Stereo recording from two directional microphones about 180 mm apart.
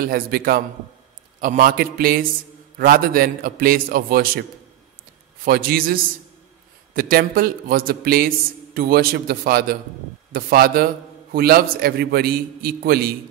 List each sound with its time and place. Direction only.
0.0 s a man's voice: 55° right (ahead or behind)